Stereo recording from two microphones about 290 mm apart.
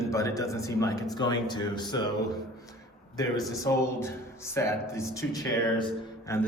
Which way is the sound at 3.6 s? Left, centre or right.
Centre.